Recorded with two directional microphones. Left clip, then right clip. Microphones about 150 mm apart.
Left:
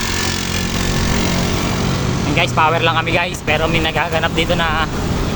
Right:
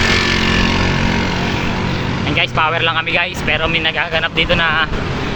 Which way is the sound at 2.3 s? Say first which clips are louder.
Left 1 dB; 20° left (ahead or behind).